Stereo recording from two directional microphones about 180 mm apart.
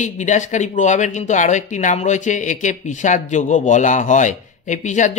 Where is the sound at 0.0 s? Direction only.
40° left (ahead or behind).